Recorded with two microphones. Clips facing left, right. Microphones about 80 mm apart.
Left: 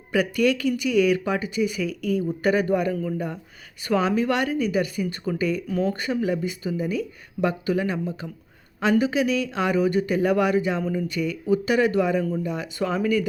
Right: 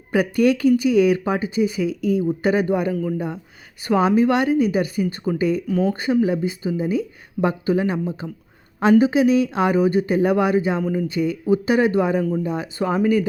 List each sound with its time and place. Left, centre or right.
0.1 s speech: right
2.9 s a man's voice: centre
3.8 s speech: right